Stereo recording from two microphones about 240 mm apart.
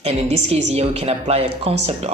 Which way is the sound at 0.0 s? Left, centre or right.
Right.